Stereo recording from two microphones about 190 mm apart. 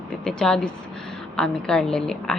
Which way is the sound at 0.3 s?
5° left (ahead or behind).